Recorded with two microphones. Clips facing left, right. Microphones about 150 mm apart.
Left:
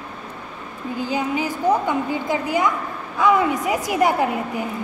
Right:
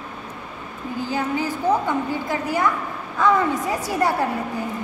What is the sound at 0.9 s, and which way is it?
A woman's voice, 15° left (ahead or behind).